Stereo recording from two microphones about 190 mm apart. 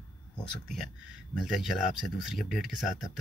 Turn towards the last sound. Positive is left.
turn(degrees=0)  # may be behind; listen again after turning